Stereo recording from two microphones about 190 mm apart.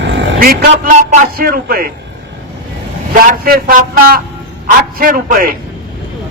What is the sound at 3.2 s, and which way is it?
Speech, 50° right (ahead or behind).